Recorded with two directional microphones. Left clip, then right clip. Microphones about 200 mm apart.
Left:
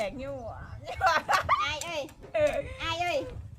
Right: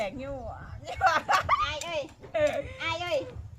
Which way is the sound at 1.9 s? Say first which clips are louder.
Right 2 dB; 55° left (ahead or behind).